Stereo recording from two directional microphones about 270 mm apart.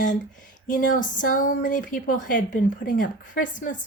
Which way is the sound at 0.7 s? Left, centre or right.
Left.